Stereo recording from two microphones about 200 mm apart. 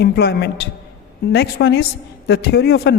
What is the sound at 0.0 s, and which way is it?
A woman's voice, 55° left (ahead or behind).